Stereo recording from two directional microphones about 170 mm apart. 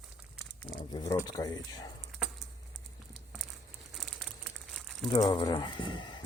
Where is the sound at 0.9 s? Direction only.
25° left (ahead or behind).